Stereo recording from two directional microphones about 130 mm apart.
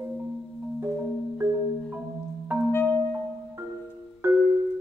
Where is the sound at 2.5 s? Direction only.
15° right (ahead or behind).